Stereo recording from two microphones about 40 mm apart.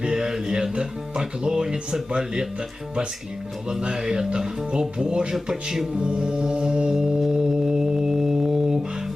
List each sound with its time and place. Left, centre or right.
0.0 s speech: centre
3.7 s speech: centre
6.0 s speech: right
6.9 s music: centre
7.3 s music: centre